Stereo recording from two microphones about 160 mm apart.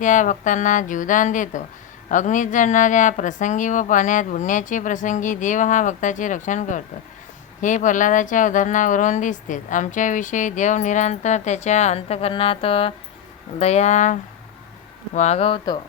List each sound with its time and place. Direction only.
0.0 s speech: 55° left (ahead or behind); by 15.8 s 30° left (ahead or behind)